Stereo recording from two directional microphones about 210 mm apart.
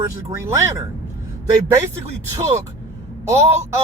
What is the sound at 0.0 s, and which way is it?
Speech, 15° right (ahead or behind).